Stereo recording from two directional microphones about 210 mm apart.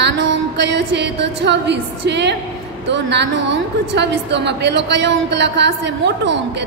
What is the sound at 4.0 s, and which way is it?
A woman's voice, 55° right (ahead or behind).